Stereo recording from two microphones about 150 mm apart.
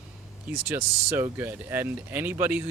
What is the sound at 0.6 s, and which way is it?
Speech, 15° right (ahead or behind).